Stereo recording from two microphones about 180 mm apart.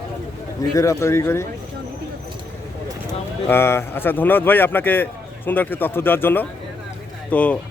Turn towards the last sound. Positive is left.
turn(degrees=5)  # may be behind; listen again after turning